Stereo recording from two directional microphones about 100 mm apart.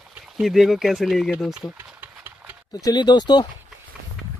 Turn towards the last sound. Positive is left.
turn(degrees=45)  # may be behind; listen again after turning